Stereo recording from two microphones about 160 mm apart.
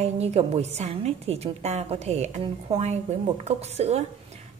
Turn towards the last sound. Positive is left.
turn(degrees=-40)  # may be behind; listen again after turning